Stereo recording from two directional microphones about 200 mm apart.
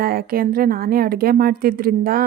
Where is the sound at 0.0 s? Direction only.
50° right (ahead or behind).